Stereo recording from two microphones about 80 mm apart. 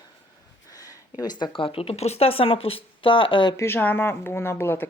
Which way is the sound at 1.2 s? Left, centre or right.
Left.